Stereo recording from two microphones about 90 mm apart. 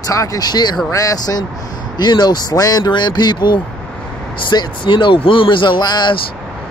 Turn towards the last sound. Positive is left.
turn(degrees=50)  # may be behind; listen again after turning